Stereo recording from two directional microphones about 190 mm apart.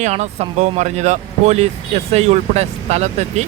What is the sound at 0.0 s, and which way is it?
Speech, 35° right (ahead or behind).